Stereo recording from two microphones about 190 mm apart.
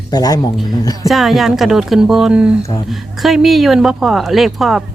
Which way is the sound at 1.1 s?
Centre (ahead or behind).